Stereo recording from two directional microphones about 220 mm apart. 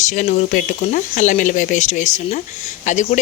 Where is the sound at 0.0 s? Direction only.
35° left (ahead or behind).